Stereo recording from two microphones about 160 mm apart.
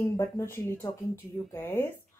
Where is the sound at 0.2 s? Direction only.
15° left (ahead or behind).